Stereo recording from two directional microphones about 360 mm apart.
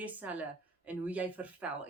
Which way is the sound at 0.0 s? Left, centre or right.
Centre.